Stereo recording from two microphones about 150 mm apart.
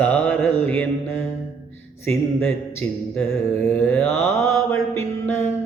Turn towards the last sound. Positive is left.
turn(degrees=15)  # may be behind; listen again after turning